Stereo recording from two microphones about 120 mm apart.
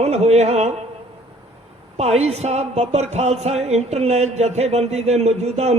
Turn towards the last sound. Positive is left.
turn(degrees=-65)  # may be behind; listen again after turning